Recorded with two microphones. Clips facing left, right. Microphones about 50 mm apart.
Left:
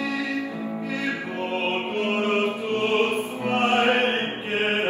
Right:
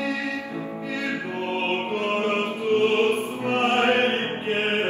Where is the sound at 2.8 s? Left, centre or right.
Left.